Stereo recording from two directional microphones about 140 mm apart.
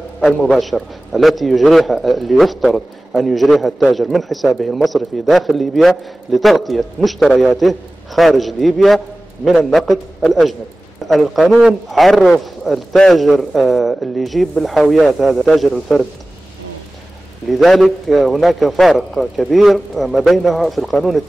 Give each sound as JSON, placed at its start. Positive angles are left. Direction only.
{"t": 0.2, "sound": "a man's voice", "side_deg": 0}
{"t": 17.5, "sound": "a man's voice", "side_deg": 0}